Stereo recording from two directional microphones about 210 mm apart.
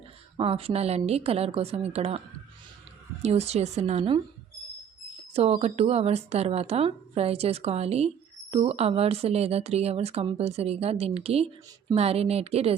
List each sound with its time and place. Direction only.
0.3 s speech: 25° right (ahead or behind)
5.3 s speech: 30° right (ahead or behind)